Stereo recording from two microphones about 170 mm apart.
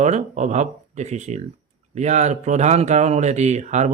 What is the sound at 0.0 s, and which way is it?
A man's voice, 45° right (ahead or behind).